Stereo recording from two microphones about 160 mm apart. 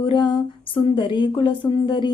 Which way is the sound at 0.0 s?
30° left (ahead or behind).